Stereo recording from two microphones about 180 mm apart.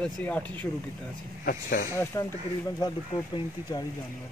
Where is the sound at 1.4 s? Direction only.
50° left (ahead or behind).